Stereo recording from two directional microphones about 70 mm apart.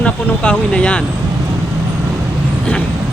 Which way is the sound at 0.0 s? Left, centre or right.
Centre.